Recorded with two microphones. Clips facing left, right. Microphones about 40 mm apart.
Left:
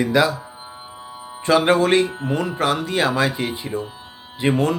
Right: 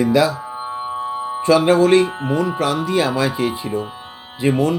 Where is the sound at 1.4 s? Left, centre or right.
Left.